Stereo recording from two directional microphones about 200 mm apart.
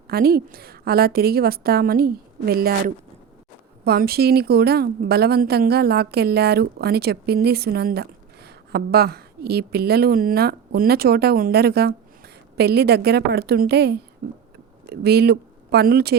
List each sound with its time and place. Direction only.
0.1 s a woman's voice: 50° right (ahead or behind)